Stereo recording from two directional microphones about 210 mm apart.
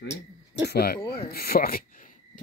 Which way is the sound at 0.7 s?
45° left (ahead or behind).